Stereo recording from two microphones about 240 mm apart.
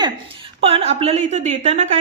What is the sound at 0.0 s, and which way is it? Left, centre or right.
A woman's voice, right.